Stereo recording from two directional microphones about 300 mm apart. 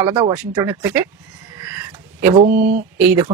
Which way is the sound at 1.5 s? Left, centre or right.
Centre.